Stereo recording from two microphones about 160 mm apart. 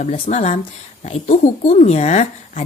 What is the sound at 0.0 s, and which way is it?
Speech, 45° left (ahead or behind).